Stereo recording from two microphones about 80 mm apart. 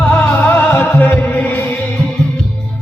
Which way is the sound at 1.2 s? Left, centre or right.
Left.